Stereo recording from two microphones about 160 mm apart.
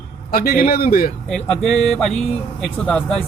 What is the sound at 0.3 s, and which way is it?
Speech, 65° left (ahead or behind).